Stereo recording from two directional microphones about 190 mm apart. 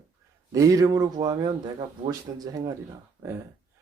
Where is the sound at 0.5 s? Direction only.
20° right (ahead or behind).